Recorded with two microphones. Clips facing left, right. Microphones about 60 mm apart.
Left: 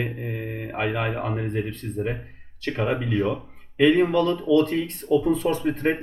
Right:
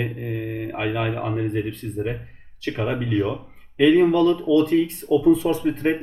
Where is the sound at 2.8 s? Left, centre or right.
Centre.